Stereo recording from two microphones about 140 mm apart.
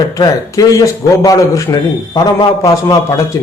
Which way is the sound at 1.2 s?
25° left (ahead or behind).